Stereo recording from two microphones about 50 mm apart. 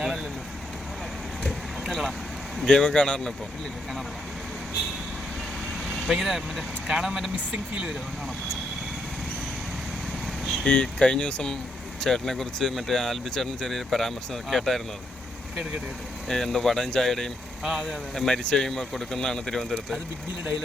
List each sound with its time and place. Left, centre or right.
1.5 s vehicle: centre
2.6 s speech: centre
5.9 s speech: centre
10.4 s vehicle: centre
10.7 s speech: centre
11.9 s speech: centre
16.3 s speech: centre
17.6 s speech: centre
17.8 s speech: centre